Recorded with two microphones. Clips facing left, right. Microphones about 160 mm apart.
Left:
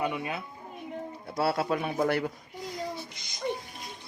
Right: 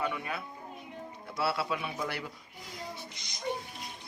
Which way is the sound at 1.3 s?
45° left (ahead or behind).